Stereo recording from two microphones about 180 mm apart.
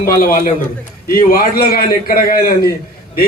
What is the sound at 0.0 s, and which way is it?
A man's voice, 50° left (ahead or behind).